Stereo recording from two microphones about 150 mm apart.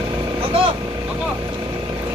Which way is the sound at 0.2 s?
35° right (ahead or behind).